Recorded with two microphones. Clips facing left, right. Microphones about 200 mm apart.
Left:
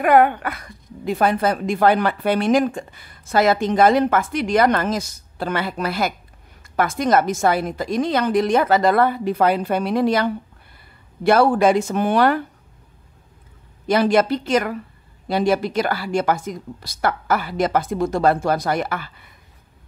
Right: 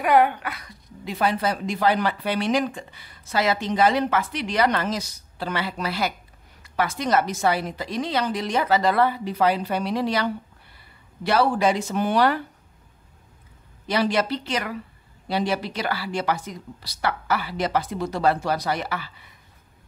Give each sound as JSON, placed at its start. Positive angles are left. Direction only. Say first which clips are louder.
{"t": 0.0, "sound": "speech", "louder": "left 4 dB", "side_deg": 50}
{"t": 13.8, "sound": "speech", "louder": "left 6 dB", "side_deg": 50}